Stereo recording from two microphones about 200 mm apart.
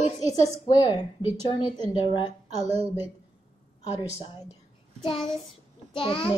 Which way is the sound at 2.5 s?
30° right (ahead or behind).